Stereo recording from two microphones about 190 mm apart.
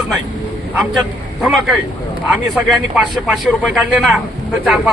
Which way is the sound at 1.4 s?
Centre (ahead or behind).